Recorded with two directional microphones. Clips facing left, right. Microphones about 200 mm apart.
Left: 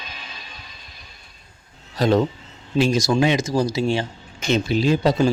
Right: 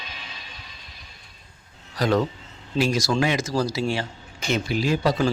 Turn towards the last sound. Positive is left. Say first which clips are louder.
# left 4 dB
turn(degrees=20)  # may be behind; listen again after turning